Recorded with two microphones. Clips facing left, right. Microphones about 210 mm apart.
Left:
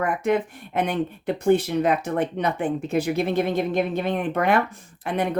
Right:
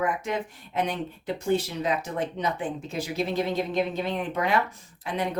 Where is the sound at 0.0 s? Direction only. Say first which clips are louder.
Left 6 dB; 60° left (ahead or behind).